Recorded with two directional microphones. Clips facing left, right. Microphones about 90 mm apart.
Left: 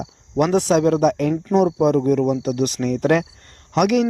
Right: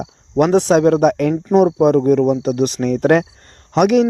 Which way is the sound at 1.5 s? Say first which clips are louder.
Right 4 dB; 45° right (ahead or behind).